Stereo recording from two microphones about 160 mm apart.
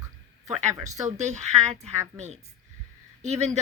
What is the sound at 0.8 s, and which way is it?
Speech, 45° right (ahead or behind).